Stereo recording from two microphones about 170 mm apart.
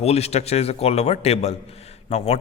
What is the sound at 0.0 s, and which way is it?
Speech, 40° left (ahead or behind).